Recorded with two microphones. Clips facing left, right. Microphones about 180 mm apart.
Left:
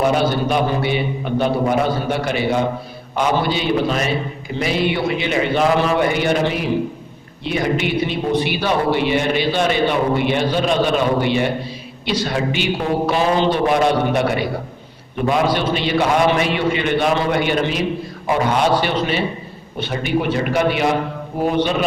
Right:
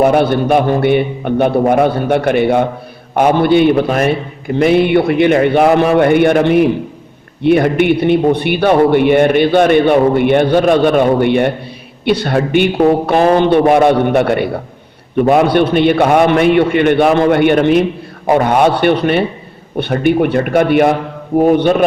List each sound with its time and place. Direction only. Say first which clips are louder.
0.0 s a man's voice: right 6 dB; 60° right (ahead or behind)